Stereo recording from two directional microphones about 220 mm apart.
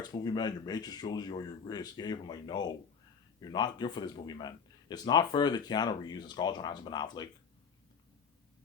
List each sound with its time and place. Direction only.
0.0 s speech: 20° left (ahead or behind)